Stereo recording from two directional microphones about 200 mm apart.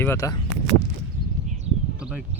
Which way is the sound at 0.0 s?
15° left (ahead or behind).